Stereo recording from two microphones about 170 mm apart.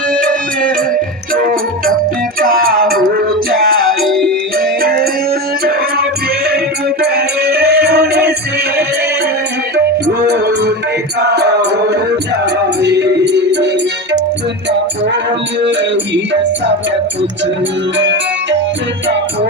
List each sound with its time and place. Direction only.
1.3 s music: 55° right (ahead or behind)
4.0 s music: centre (ahead or behind)
4.5 s music: 60° right (ahead or behind)
10.2 s music: 75° right (ahead or behind); by 13.7 s 90° right
16.1 s music: 90° right
17.9 s music: 90° right